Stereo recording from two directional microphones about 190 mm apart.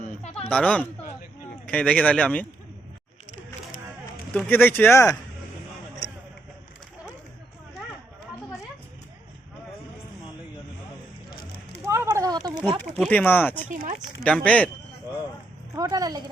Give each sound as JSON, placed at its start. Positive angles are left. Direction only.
{"t": 0.0, "sound": "a sound", "side_deg": 35}
{"t": 0.5, "sound": "speech", "side_deg": 5}
{"t": 4.3, "sound": "speech", "side_deg": 10}
{"t": 11.9, "sound": "a sound", "side_deg": -15}
{"t": 13.0, "sound": "speech", "side_deg": 10}
{"t": 13.7, "sound": "speech", "side_deg": -40}
{"t": 14.3, "sound": "speech", "side_deg": 5}
{"t": 15.7, "sound": "a woman's voice", "side_deg": -20}